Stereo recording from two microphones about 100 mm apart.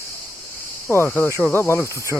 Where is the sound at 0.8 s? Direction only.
25° left (ahead or behind).